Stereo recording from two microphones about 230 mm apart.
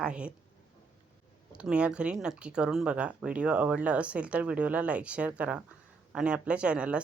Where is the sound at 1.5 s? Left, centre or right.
Centre.